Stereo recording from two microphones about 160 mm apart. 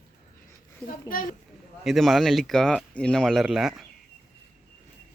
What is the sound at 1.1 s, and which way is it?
Speech, 60° left (ahead or behind).